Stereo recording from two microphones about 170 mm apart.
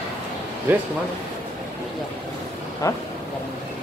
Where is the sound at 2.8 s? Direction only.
20° left (ahead or behind).